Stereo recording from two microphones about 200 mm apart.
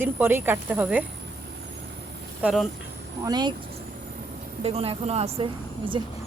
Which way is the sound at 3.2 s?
20° right (ahead or behind).